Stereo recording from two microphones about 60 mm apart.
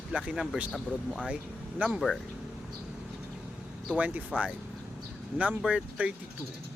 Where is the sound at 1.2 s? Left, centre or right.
Right.